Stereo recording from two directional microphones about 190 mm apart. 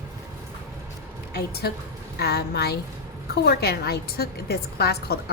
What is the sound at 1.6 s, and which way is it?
A woman's voice, 60° left (ahead or behind).